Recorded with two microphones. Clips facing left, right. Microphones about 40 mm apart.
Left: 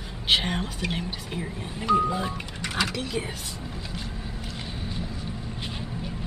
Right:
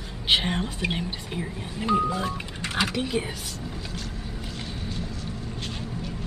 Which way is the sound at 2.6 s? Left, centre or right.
Centre.